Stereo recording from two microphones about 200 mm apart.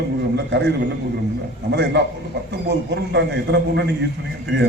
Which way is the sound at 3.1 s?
60° right (ahead or behind).